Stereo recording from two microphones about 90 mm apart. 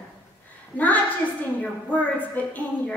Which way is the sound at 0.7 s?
20° left (ahead or behind).